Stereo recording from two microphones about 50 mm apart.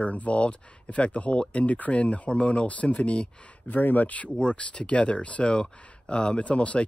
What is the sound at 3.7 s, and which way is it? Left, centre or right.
Speech, left.